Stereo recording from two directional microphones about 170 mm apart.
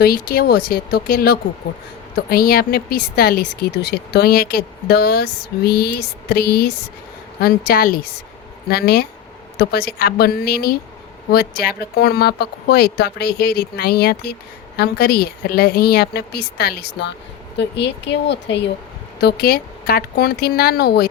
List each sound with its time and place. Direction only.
0.0 s speech: 65° left (ahead or behind); by 17.2 s 80° left
17.6 s speech: 90° left
19.2 s speech: 65° left (ahead or behind)